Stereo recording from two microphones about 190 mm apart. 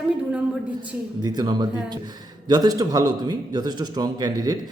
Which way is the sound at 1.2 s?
20° right (ahead or behind).